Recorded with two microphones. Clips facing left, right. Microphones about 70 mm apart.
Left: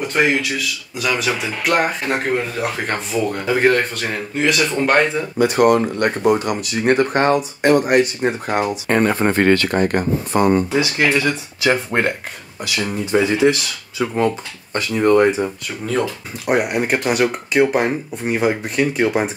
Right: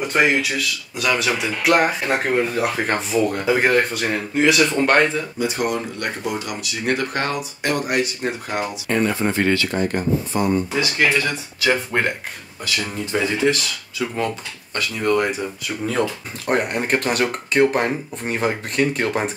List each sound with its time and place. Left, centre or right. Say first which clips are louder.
0.0 s speech: left 1 dB; centre
5.4 s speech: left 10 dB; left
5.8 s speech: left 8 dB; left
8.8 s speech: left 2 dB; left
10.7 s speech: left 2 dB; left
16.4 s speech: left 3 dB; centre